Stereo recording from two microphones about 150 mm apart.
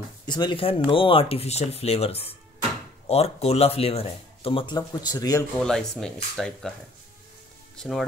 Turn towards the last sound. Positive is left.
turn(degrees=5)  # may be behind; listen again after turning